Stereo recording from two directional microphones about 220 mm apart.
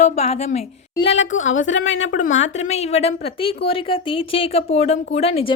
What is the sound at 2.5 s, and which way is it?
A woman's voice, 30° left (ahead or behind).